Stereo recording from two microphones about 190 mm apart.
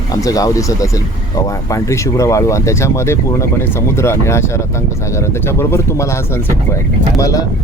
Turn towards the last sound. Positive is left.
turn(degrees=15)  # may be behind; listen again after turning